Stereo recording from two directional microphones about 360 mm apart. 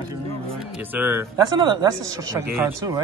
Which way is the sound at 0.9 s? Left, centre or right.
Centre.